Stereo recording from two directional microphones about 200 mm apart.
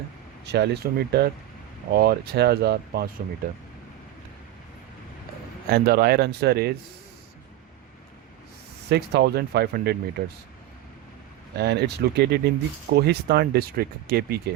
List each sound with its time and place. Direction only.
0.4 s speech: 55° right (ahead or behind)
5.7 s speech: 50° right (ahead or behind)
8.9 s speech: 55° right (ahead or behind)
11.5 s speech: 55° right (ahead or behind)